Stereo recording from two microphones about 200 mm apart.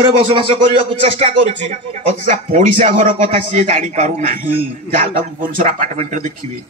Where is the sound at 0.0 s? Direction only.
25° right (ahead or behind).